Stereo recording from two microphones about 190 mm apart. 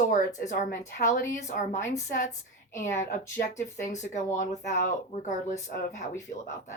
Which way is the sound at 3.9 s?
40° left (ahead or behind).